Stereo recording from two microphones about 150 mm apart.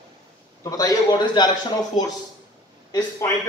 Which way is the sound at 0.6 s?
25° left (ahead or behind).